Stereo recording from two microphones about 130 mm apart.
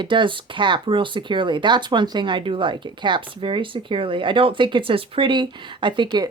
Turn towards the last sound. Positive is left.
turn(degrees=-35)  # may be behind; listen again after turning